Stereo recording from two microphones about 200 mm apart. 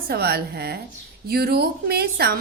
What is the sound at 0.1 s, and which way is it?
A woman's voice, 50° right (ahead or behind).